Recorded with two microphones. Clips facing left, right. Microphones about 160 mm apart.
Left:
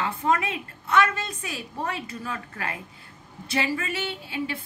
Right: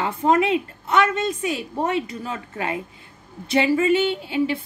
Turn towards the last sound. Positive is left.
turn(degrees=-25)  # may be behind; listen again after turning